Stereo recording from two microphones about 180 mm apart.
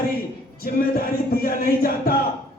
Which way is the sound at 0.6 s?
55° left (ahead or behind).